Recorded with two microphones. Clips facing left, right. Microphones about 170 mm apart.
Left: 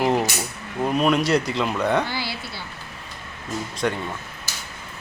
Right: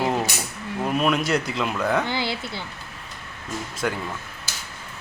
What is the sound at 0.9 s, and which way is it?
Speech, centre (ahead or behind).